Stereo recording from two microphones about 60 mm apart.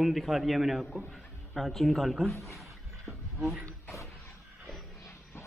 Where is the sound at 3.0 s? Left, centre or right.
Centre.